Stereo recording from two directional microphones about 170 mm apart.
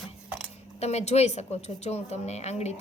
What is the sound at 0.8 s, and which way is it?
A woman's voice, 40° left (ahead or behind).